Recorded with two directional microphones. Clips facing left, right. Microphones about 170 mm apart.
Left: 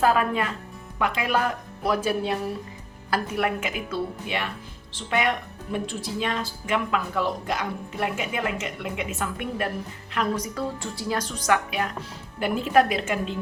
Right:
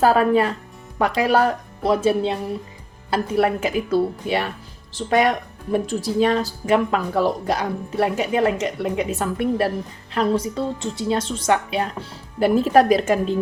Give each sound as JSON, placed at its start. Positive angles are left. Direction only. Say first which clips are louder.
{"t": 0.0, "sound": "speech", "louder": "right 6 dB", "side_deg": -35}
{"t": 12.4, "sound": "speech", "louder": "right 6 dB", "side_deg": -40}